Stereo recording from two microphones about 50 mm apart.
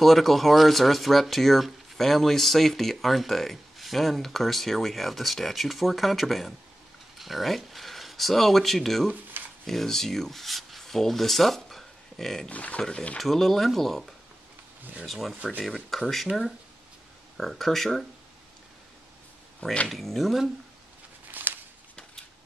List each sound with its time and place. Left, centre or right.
0.0 s speech: centre
9.3 s shuffling cards: right
9.7 s speech: centre
12.4 s speech: left
13.2 s speech: centre
16.3 s speech: right
17.4 s speech: centre
19.9 s speech: centre
21.3 s a sound: right